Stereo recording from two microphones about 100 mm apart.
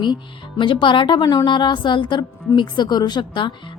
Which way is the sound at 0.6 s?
55° left (ahead or behind).